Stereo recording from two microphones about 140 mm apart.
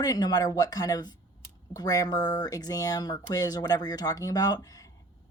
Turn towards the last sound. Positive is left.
turn(degrees=25)  # may be behind; listen again after turning